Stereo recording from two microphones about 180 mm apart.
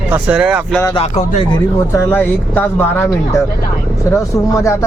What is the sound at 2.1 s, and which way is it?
Speech, 10° left (ahead or behind).